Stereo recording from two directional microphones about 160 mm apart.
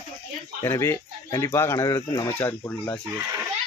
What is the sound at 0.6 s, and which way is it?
Speech, 15° left (ahead or behind).